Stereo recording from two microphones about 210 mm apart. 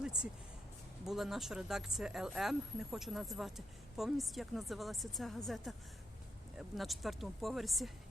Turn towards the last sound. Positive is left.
turn(degrees=0)  # may be behind; listen again after turning